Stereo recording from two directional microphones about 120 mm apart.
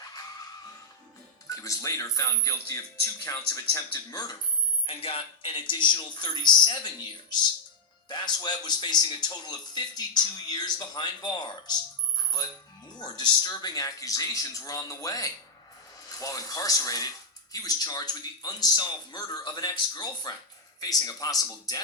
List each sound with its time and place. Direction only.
1.5 s speech: 25° left (ahead or behind)
4.9 s speech: 55° left (ahead or behind); by 11.7 s 35° left (ahead or behind)
13.0 s speech: 35° left (ahead or behind)